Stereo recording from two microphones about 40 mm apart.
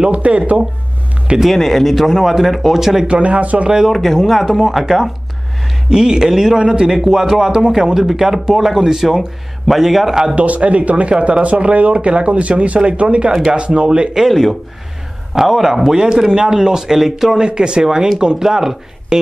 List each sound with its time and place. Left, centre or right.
0.1 s speech: right
1.4 s speech: centre
3.1 s speech: right
3.9 s speech: centre
5.9 s a man's voice: centre
10.3 s speech: right
14.2 s a man's voice: centre
17.4 s a man's voice: right